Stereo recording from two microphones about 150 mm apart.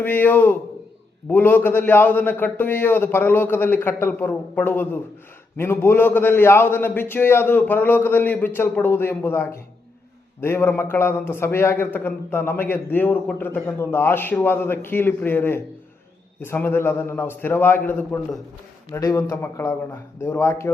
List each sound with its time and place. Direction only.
0.0 s a man's voice: 15° left (ahead or behind)
18.9 s a man's voice: 20° left (ahead or behind)